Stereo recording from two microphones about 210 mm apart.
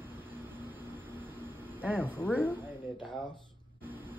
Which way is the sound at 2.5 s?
10° right (ahead or behind).